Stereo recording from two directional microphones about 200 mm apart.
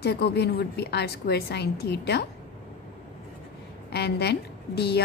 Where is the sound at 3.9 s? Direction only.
55° left (ahead or behind).